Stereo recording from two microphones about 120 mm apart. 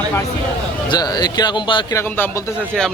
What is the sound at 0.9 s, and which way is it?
Speech, 35° left (ahead or behind).